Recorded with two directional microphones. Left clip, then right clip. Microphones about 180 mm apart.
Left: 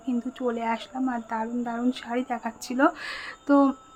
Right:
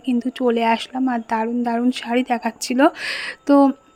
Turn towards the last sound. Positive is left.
turn(degrees=-30)  # may be behind; listen again after turning